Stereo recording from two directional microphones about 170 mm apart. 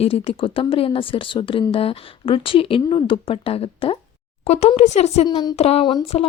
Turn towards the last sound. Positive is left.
turn(degrees=35)  # may be behind; listen again after turning